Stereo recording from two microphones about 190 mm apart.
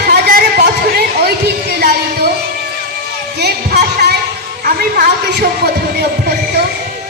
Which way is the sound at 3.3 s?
60° right (ahead or behind).